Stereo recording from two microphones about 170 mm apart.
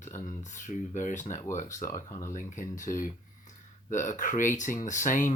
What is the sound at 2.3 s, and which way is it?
Speech, 50° left (ahead or behind).